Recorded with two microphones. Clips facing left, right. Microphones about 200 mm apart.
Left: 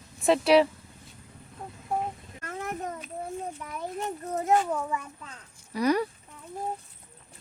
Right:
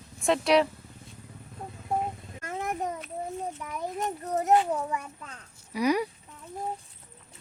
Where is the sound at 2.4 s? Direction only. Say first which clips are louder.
Right 2 dB; 15° right (ahead or behind).